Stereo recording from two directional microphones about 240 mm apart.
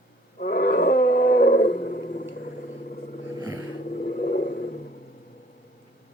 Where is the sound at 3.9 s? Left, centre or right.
Left.